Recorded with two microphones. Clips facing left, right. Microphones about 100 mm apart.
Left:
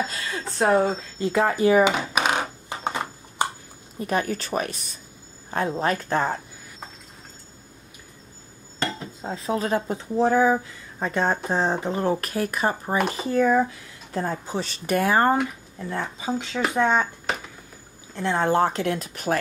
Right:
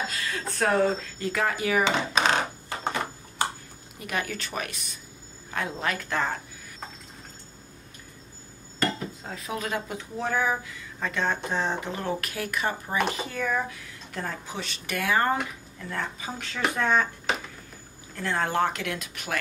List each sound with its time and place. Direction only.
0.1 s speech: 30° left (ahead or behind)
1.9 s a sound: 10° left (ahead or behind)
4.0 s speech: 35° left (ahead or behind)
9.2 s speech: 30° left (ahead or behind)
18.1 s speech: 25° left (ahead or behind)